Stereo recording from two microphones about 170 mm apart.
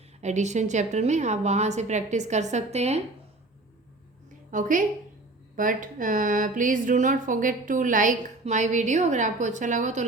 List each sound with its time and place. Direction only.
0.2 s speech: 45° right (ahead or behind)
4.5 s speech: 50° right (ahead or behind)